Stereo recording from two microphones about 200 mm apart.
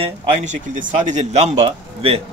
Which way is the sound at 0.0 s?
35° right (ahead or behind).